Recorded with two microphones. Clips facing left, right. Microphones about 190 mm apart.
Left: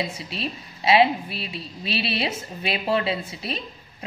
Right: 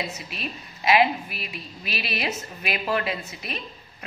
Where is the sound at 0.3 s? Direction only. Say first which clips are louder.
Left 4 dB; 30° left (ahead or behind).